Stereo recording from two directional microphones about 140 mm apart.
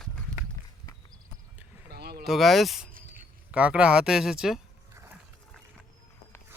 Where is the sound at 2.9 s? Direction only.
90° right.